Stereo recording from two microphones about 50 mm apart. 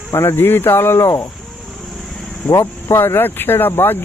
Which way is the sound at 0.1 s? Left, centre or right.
Left.